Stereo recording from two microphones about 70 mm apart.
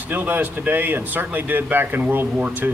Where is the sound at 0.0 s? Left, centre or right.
Right.